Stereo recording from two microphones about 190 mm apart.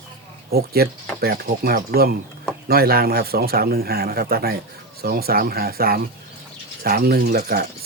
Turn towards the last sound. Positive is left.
turn(degrees=-55)  # may be behind; listen again after turning